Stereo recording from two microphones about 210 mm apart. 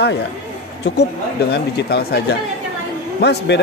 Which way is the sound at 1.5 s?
50° left (ahead or behind).